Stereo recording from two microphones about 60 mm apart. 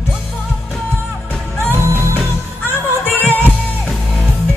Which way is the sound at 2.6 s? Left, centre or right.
Right.